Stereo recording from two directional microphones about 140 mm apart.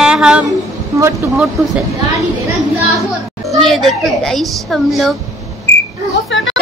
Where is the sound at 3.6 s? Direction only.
Centre (ahead or behind).